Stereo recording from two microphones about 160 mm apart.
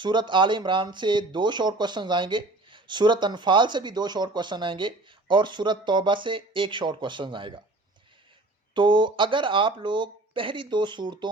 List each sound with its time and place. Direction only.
0.0 s speech: 30° right (ahead or behind)
8.7 s speech: 30° right (ahead or behind)